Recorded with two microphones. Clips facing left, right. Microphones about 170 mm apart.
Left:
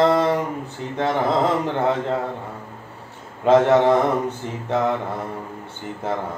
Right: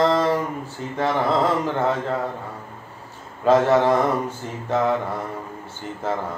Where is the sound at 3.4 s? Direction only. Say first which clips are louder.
Left 2 dB; 20° left (ahead or behind).